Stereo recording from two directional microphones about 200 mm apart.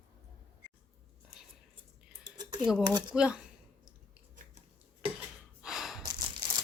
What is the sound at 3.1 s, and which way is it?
Speech, 5° right (ahead or behind).